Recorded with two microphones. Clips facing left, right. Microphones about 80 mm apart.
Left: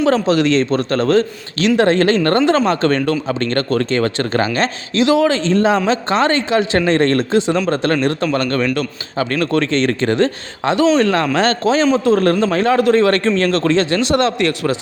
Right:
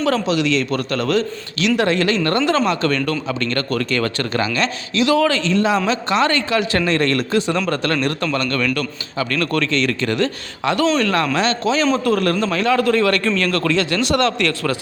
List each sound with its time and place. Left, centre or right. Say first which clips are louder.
0.3 s a man's voice: left 4 dB; left